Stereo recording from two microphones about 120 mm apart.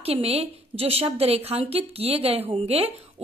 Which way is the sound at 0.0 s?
55° right (ahead or behind).